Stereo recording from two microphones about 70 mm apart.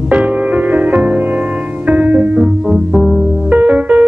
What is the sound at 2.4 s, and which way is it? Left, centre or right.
Music, centre.